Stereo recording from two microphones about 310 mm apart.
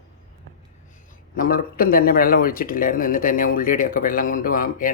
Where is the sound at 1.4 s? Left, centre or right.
Left.